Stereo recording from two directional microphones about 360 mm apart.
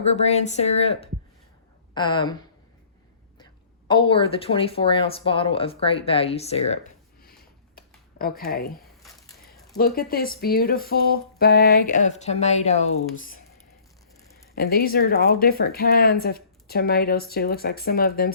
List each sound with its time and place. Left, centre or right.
0.0 s speech: centre
3.8 s speech: centre
7.2 s a sound: left
8.8 s a sound: centre
9.7 s speech: left
14.5 s speech: left